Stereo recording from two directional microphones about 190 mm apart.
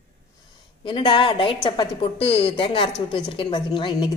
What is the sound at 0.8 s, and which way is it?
A woman's voice, 25° left (ahead or behind).